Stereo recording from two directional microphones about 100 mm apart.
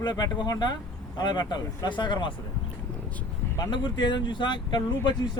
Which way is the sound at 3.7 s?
50° left (ahead or behind).